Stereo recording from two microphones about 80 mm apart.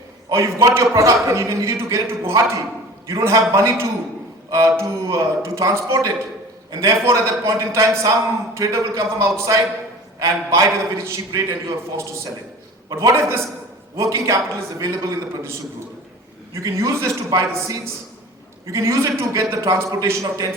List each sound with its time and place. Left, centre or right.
0.3 s a man's voice: right
12.9 s a man's voice: right
16.6 s a man's voice: right